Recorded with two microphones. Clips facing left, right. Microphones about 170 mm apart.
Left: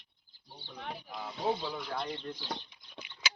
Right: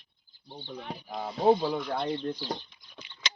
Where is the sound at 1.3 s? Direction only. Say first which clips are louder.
Right 10 dB; 60° right (ahead or behind).